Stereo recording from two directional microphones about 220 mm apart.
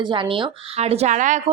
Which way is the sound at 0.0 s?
20° right (ahead or behind).